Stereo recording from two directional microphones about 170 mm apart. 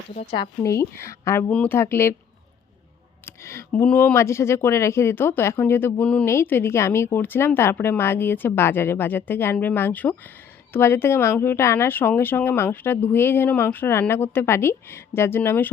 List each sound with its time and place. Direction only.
0.1 s speech: 40° left (ahead or behind)
0.6 s speech: 15° left (ahead or behind)
3.2 s speech: 15° left (ahead or behind)